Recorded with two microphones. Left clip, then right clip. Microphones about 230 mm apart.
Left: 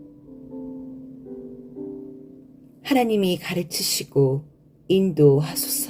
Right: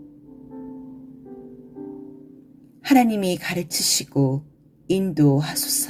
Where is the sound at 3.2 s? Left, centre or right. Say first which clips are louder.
Even; right.